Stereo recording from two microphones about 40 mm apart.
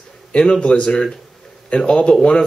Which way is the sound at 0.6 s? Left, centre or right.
Left.